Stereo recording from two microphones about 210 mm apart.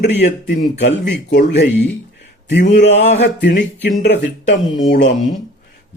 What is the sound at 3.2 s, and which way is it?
Speech, 55° left (ahead or behind).